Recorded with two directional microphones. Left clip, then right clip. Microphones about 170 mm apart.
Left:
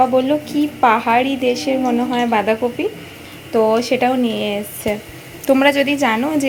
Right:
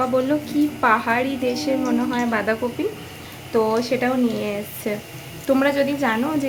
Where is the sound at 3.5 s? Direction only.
10° left (ahead or behind).